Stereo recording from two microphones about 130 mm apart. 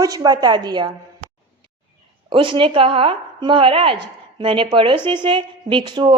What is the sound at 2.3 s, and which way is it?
A woman's voice, 40° right (ahead or behind).